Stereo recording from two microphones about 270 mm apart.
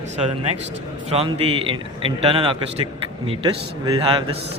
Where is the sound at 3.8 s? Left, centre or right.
Centre.